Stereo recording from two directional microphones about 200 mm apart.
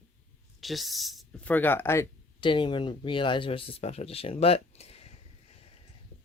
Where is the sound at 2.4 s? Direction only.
25° left (ahead or behind).